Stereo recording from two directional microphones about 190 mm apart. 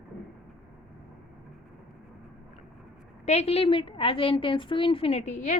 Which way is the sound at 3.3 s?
35° left (ahead or behind).